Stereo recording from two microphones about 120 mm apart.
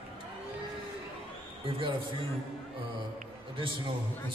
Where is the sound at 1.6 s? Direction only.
50° right (ahead or behind).